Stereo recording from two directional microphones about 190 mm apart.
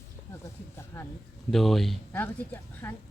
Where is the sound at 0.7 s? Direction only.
15° left (ahead or behind).